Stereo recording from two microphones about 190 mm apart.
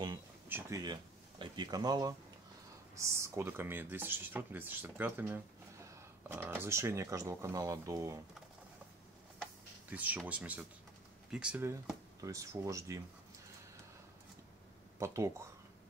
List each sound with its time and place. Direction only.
0.5 s speech: 15° right (ahead or behind)
9.8 s speech: 10° right (ahead or behind)
15.0 s speech: 15° right (ahead or behind)